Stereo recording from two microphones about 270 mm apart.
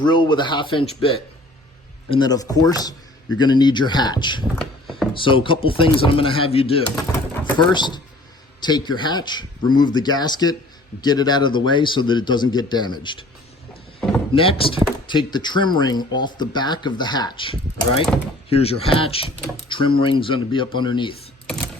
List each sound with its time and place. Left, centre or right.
0.0 s speech: centre
4.5 s a sound: centre
5.1 s speech: centre
6.9 s speech: centre
14.3 s speech: centre